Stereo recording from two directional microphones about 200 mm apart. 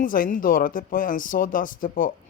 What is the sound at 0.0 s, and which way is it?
Speech, 45° left (ahead or behind).